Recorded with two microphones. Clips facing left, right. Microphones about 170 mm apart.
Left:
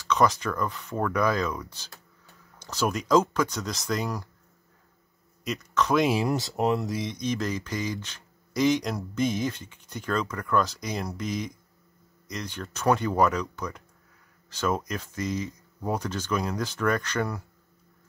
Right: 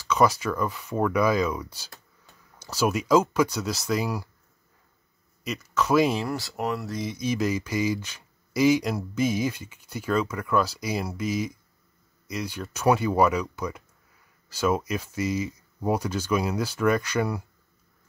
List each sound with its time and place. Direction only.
0.1 s speech: 10° right (ahead or behind)
5.4 s speech: 5° right (ahead or behind)
6.1 s speech: 20° left (ahead or behind)
7.0 s speech: 5° right (ahead or behind)